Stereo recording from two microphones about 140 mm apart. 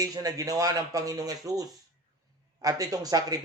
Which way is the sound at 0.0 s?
25° right (ahead or behind).